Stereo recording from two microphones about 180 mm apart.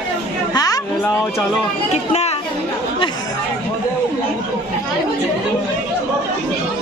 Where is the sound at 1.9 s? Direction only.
40° left (ahead or behind).